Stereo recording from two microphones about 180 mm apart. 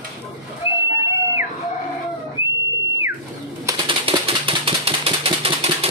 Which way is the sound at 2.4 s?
15° right (ahead or behind).